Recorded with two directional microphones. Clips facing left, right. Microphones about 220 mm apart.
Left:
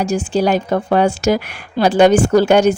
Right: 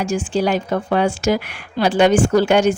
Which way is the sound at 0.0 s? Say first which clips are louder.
Left 3 dB; 40° left (ahead or behind).